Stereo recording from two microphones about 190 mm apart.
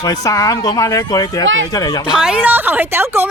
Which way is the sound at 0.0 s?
20° left (ahead or behind).